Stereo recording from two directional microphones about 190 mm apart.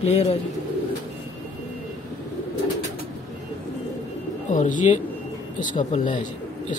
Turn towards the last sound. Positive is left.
turn(degrees=40)  # may be behind; listen again after turning